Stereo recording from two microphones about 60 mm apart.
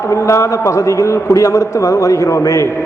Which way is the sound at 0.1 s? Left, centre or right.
Left.